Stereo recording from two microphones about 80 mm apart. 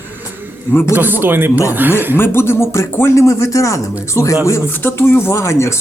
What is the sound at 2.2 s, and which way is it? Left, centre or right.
Speech, left.